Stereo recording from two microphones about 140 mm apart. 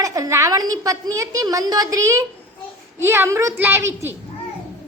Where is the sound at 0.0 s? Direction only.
25° right (ahead or behind).